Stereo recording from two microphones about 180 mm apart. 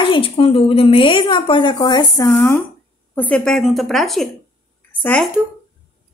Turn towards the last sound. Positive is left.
turn(degrees=10)  # may be behind; listen again after turning